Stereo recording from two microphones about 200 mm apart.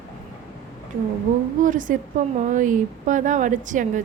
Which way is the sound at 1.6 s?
40° right (ahead or behind).